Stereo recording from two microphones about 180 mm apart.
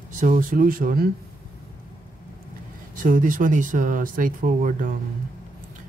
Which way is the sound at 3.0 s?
50° right (ahead or behind).